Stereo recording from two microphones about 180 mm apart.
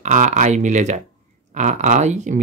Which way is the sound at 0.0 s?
45° right (ahead or behind).